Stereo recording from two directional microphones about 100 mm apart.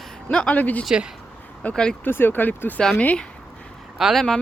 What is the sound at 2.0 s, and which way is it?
Speech, 20° left (ahead or behind).